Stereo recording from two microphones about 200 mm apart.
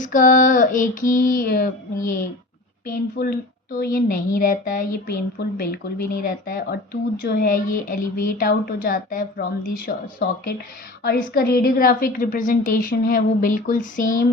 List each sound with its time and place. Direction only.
0.0 s female singing: 40° left (ahead or behind)
2.8 s a woman's voice: 45° left (ahead or behind)